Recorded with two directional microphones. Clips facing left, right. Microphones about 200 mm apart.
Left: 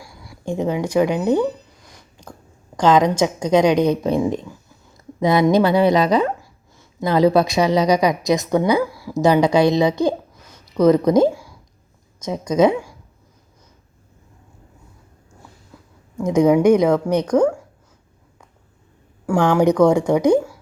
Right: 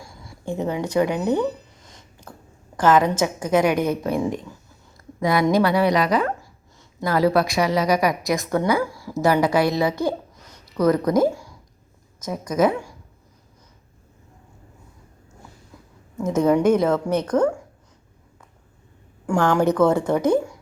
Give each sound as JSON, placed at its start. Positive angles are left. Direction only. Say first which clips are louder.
{"t": 0.4, "sound": "a woman's voice", "louder": "left 3 dB", "side_deg": 15}
{"t": 1.8, "sound": "a sound", "louder": "left 1 dB", "side_deg": -25}
{"t": 2.7, "sound": "a woman's voice", "louder": "left 2 dB", "side_deg": 15}
{"t": 16.2, "sound": "a woman's voice", "louder": "left 4 dB", "side_deg": 15}
{"t": 19.4, "sound": "a woman's voice", "louder": "left 3 dB", "side_deg": 15}